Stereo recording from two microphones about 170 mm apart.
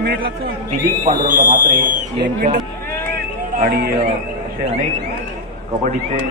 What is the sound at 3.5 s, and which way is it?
Speech, 55° right (ahead or behind).